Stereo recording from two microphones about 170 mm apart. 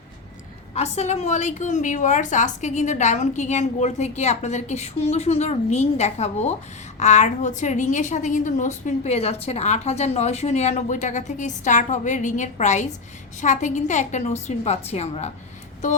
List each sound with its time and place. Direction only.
0.7 s a woman's voice: 40° left (ahead or behind)